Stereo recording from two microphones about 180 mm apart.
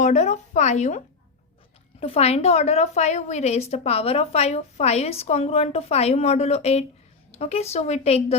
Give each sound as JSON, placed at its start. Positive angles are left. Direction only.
{"t": 0.0, "sound": "a woman's voice", "side_deg": 40}